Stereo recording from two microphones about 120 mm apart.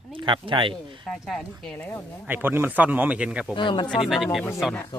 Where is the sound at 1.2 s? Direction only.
Centre (ahead or behind).